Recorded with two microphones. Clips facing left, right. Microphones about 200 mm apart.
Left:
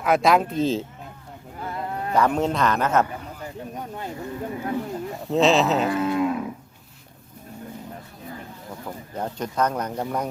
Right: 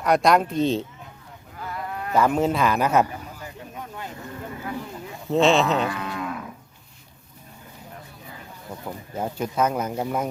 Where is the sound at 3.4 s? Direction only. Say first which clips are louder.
Left 4 dB; 35° left (ahead or behind).